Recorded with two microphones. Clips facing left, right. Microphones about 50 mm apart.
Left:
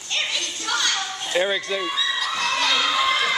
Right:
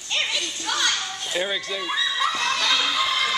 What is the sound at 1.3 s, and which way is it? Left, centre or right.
Speech, centre.